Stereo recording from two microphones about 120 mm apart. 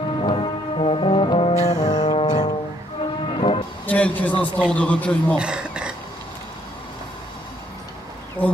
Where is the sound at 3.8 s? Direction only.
10° left (ahead or behind).